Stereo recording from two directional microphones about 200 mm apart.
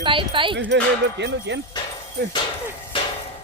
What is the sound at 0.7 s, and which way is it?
Speech, 60° right (ahead or behind).